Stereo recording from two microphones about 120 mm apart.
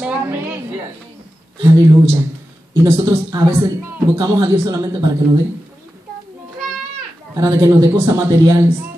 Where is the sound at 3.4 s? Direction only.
20° right (ahead or behind).